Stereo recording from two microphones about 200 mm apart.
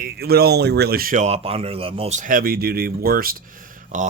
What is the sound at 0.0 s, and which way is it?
Speech, 50° right (ahead or behind).